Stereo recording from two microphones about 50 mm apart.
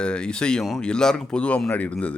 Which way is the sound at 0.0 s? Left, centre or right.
Centre.